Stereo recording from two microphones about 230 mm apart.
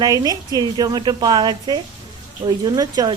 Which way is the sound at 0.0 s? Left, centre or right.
Centre.